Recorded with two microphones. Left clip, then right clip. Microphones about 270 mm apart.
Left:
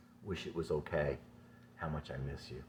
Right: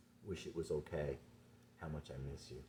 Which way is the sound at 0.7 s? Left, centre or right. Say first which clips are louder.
Left 7 dB; centre.